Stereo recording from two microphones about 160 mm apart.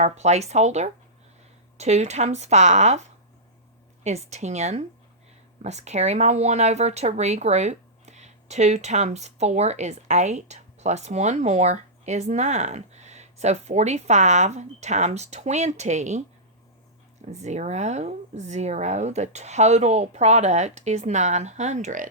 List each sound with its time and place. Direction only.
0.0 s speech: 45° right (ahead or behind)
4.0 s speech: 45° right (ahead or behind)
17.3 s speech: 45° right (ahead or behind)